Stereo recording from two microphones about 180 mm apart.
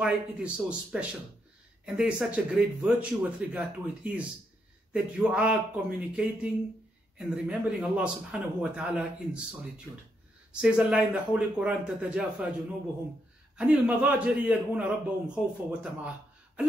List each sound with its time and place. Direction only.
0.0 s a man's voice: 5° right (ahead or behind)
10.5 s a man's voice: 5° right (ahead or behind)
13.6 s a man's voice: 5° right (ahead or behind)